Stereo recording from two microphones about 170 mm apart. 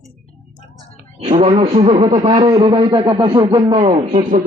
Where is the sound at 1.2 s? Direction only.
40° right (ahead or behind).